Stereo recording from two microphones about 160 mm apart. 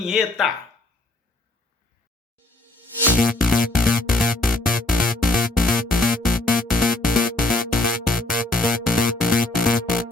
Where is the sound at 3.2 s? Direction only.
60° left (ahead or behind).